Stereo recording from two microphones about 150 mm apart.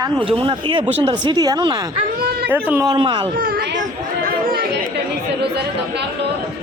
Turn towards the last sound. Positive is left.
turn(degrees=-75)  # may be behind; listen again after turning